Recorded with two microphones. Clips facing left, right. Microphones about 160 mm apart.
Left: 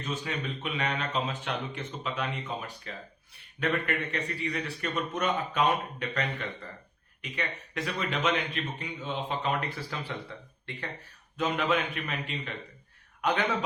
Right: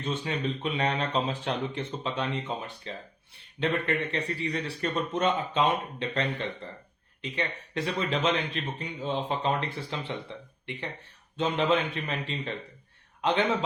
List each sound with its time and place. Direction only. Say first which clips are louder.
0.0 s speech: right 4 dB; 30° right (ahead or behind)